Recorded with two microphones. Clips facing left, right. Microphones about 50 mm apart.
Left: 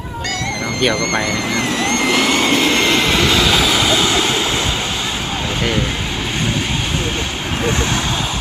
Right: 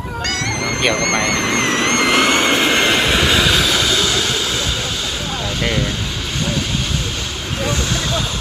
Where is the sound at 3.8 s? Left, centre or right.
Left.